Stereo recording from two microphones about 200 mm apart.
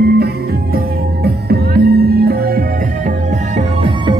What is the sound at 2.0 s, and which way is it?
Music, 50° right (ahead or behind).